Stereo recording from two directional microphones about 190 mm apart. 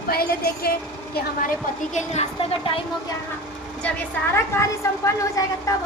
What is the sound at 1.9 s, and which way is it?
Speech, 35° left (ahead or behind).